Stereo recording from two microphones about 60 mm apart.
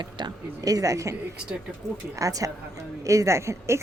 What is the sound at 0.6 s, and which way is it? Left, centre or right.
Speech, right.